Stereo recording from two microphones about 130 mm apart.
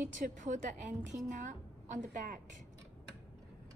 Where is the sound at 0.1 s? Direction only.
75° right (ahead or behind).